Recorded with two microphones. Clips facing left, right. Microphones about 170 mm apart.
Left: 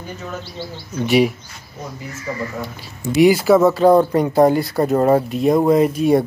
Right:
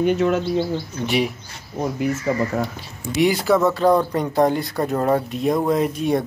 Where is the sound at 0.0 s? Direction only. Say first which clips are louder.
Right 13 dB; 80° right.